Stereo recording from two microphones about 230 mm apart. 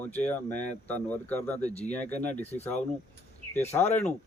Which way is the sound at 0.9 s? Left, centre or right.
Centre.